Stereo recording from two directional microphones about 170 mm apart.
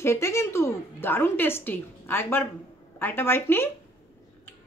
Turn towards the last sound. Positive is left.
turn(degrees=15)  # may be behind; listen again after turning